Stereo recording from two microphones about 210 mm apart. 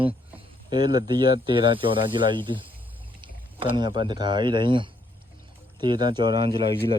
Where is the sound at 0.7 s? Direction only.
20° right (ahead or behind).